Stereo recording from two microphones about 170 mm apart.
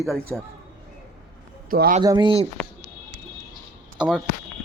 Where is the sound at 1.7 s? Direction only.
55° right (ahead or behind).